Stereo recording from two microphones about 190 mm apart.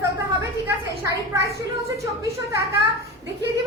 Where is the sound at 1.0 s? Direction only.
15° right (ahead or behind).